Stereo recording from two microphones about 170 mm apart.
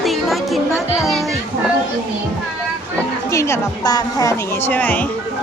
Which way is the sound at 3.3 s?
15° left (ahead or behind).